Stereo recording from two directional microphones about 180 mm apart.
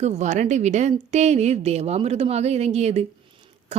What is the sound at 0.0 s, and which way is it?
A woman's voice, 40° right (ahead or behind).